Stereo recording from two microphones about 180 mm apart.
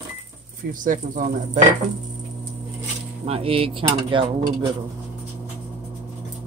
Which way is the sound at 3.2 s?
30° right (ahead or behind).